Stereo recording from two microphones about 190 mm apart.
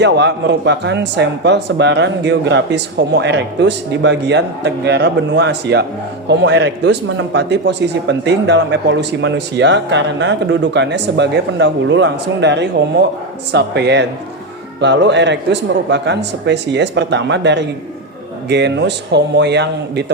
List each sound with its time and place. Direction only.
0.0 s speech: 65° right (ahead or behind)